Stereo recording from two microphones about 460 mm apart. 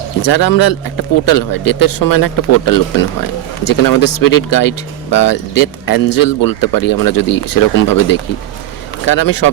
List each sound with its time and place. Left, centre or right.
0.2 s speech: left